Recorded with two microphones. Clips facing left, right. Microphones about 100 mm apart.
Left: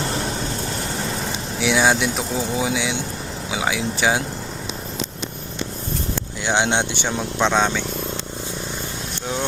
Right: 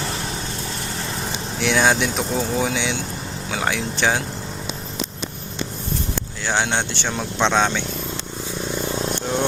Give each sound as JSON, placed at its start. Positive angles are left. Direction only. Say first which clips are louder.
{"t": 1.5, "sound": "speech", "louder": "even", "side_deg": 5}
{"t": 6.4, "sound": "speech", "louder": "left 2 dB", "side_deg": 20}
{"t": 7.2, "sound": "speech", "louder": "even", "side_deg": 5}